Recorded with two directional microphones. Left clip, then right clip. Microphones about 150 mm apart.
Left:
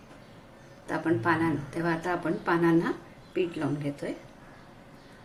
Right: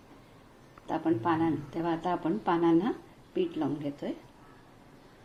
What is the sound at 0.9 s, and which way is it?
Speech, 30° right (ahead or behind).